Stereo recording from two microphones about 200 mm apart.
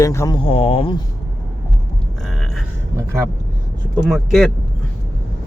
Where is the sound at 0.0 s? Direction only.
15° left (ahead or behind).